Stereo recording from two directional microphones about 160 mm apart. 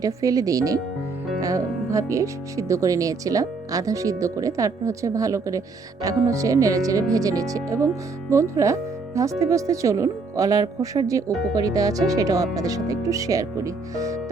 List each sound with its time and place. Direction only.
0.0 s speech: 20° right (ahead or behind)